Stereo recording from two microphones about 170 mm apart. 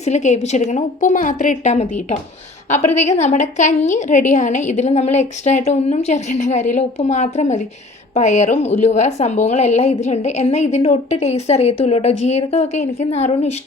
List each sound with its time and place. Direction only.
0.0 s a woman's voice: 40° left (ahead or behind)